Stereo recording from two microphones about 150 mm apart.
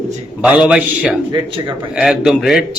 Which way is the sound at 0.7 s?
10° right (ahead or behind).